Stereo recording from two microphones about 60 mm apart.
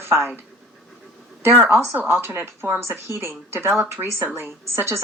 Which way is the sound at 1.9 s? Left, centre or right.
Right.